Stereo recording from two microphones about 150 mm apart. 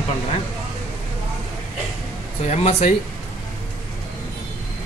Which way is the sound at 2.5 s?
40° left (ahead or behind).